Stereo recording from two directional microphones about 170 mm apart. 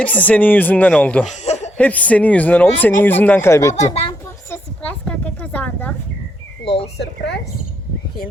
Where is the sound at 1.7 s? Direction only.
10° left (ahead or behind).